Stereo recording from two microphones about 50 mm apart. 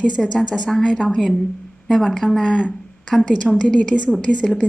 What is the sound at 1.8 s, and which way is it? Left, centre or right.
A woman's voice, centre.